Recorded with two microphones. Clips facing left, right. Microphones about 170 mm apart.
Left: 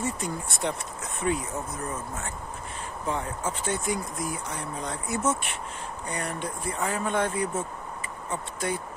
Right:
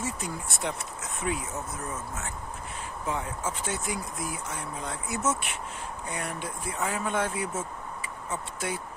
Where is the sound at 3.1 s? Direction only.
5° right (ahead or behind).